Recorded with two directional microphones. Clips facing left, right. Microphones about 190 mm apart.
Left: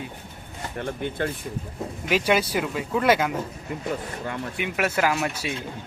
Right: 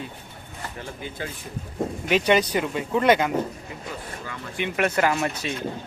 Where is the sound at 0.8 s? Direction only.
60° left (ahead or behind).